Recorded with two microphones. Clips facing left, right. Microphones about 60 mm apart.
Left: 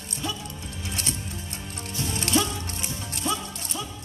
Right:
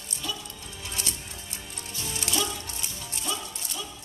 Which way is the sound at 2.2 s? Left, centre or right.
Left.